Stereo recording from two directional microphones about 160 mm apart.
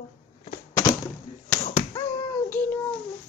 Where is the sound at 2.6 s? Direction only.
10° left (ahead or behind).